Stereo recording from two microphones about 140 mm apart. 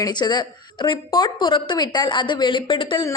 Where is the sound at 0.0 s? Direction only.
30° left (ahead or behind).